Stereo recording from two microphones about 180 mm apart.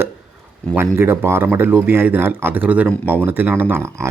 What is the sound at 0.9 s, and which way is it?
Speech, 15° right (ahead or behind).